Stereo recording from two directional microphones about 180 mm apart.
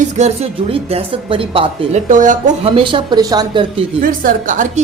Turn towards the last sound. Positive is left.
turn(degrees=-45)  # may be behind; listen again after turning